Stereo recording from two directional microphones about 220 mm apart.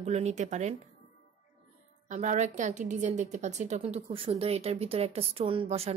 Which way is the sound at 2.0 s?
35° right (ahead or behind).